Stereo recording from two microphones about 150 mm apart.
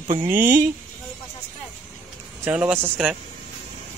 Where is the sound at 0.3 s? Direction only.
60° right (ahead or behind).